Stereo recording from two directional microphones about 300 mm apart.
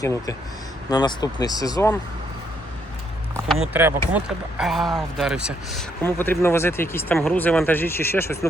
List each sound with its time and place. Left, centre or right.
0.0 s speech: centre
3.5 s speech: centre